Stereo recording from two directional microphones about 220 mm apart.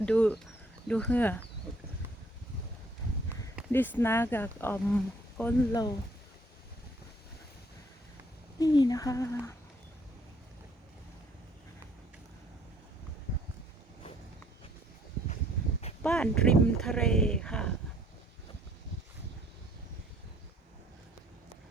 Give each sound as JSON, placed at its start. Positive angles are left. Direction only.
{"t": 0.0, "sound": "speech", "side_deg": 5}
{"t": 3.7, "sound": "speech", "side_deg": 10}
{"t": 8.5, "sound": "speech", "side_deg": 20}
{"t": 16.0, "sound": "speech", "side_deg": 5}